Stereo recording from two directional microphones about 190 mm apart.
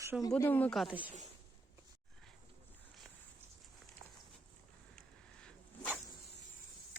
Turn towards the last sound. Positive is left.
turn(degrees=5)  # may be behind; listen again after turning